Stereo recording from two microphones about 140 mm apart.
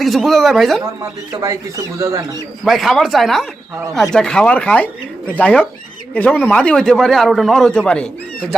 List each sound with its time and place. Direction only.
0.0 s speech: centre (ahead or behind)
1.3 s speech: 25° right (ahead or behind)
2.6 s speech: centre (ahead or behind)